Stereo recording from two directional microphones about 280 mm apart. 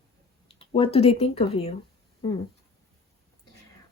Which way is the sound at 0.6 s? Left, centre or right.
Centre.